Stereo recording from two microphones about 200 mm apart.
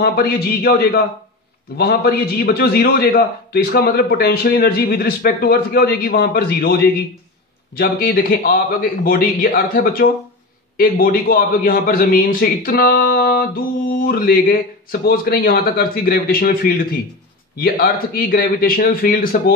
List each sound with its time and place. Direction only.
0.0 s a man's voice: 50° left (ahead or behind)